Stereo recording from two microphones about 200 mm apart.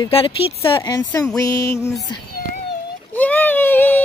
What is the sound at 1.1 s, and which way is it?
Music, 10° left (ahead or behind).